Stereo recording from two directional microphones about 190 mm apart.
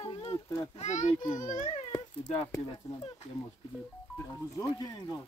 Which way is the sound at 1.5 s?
40° left (ahead or behind).